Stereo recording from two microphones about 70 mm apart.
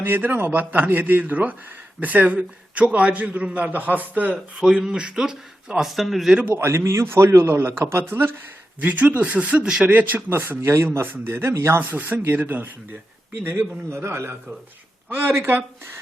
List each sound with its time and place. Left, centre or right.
0.0 s a man's voice: right
4.6 s speech: centre
6.5 s a man's voice: right
11.3 s a man's voice: right
11.8 s a man's voice: right
13.9 s a man's voice: right